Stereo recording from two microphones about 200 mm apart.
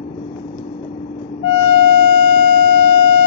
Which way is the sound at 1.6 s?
55° right (ahead or behind).